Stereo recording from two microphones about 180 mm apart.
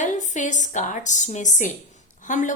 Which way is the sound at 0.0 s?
40° left (ahead or behind).